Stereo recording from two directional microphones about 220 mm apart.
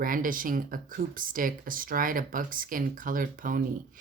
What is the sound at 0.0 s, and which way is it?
Speech, 40° right (ahead or behind).